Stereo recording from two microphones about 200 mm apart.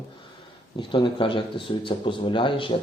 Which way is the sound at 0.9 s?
25° left (ahead or behind).